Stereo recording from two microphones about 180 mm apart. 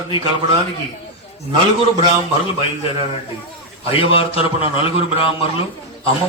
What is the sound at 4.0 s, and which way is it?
A man's voice, 30° left (ahead or behind).